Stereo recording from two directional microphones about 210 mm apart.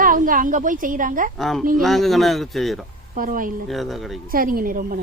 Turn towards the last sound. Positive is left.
turn(degrees=-45)  # may be behind; listen again after turning